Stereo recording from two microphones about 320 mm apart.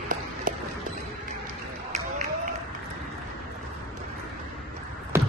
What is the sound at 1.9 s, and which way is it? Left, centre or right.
Run, right.